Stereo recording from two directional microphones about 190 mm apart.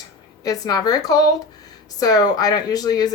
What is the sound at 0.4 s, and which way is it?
Speech, 20° left (ahead or behind).